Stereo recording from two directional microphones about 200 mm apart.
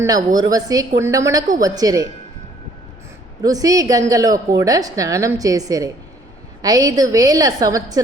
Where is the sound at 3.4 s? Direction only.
20° right (ahead or behind).